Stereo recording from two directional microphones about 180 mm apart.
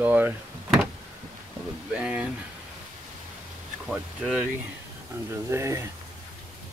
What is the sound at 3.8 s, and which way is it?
Speech, centre (ahead or behind).